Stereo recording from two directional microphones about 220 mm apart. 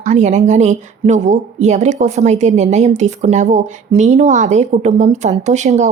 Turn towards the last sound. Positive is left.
turn(degrees=-35)  # may be behind; listen again after turning